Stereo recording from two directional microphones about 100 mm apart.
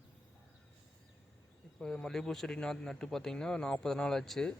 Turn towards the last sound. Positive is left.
turn(degrees=5)  # may be behind; listen again after turning